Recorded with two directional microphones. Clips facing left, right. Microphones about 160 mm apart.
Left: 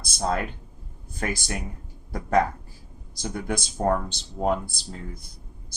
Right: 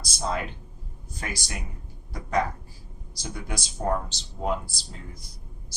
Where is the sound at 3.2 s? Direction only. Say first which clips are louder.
Left 6 dB; 50° left (ahead or behind).